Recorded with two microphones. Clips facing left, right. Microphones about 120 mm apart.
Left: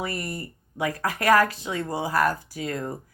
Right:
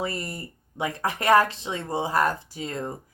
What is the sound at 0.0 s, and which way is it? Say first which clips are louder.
Speech: even; 25° right (ahead or behind).